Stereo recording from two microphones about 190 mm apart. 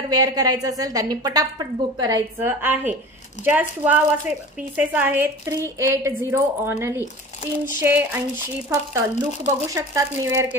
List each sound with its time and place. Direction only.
0.1 s a woman's voice: 20° right (ahead or behind)